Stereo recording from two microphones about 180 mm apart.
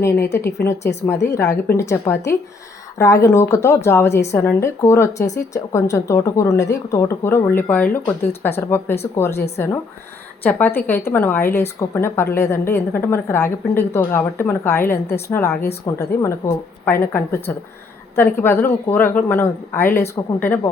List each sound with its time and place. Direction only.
0.3 s a woman's voice: 15° left (ahead or behind)